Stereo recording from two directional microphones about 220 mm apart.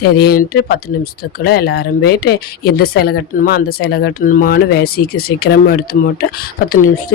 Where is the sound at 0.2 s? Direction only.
45° left (ahead or behind).